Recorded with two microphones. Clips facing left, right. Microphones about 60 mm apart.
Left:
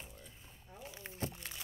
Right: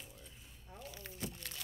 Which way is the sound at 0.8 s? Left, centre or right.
Left.